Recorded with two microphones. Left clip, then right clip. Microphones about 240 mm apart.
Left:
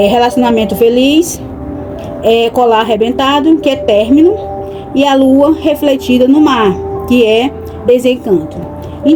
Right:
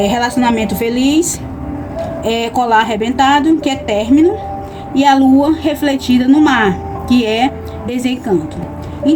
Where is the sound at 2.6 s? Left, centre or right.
Right.